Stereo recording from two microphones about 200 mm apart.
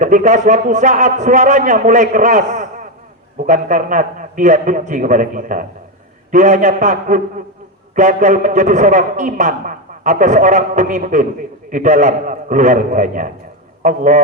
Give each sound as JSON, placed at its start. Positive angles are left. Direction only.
{"t": 0.0, "sound": "a man's voice", "side_deg": -40}